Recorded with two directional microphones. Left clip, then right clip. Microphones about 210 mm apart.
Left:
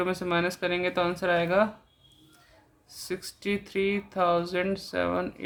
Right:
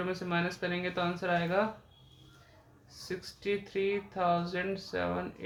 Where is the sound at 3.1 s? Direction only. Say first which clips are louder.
Left 3 dB; 45° left (ahead or behind).